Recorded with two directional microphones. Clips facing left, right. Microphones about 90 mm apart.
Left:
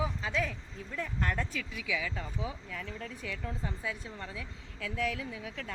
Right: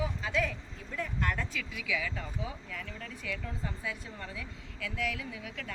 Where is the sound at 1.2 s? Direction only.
30° left (ahead or behind).